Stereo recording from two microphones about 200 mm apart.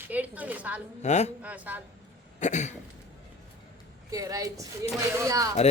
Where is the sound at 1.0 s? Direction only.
35° left (ahead or behind).